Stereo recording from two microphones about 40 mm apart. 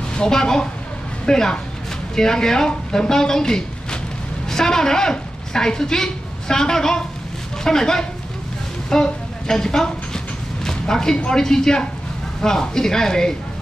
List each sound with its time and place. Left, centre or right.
0.1 s a woman's voice: centre
8.9 s a sound: centre
11.2 s speech: centre